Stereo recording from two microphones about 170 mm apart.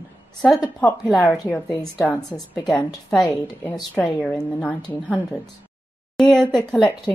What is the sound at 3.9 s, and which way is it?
A woman's voice, 5° left (ahead or behind).